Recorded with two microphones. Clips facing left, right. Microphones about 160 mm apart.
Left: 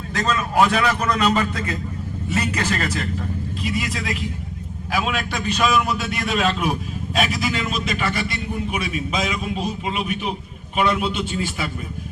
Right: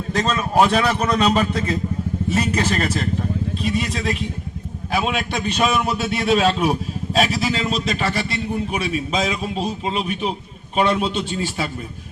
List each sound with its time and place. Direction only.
0.2 s a man's voice: 25° right (ahead or behind)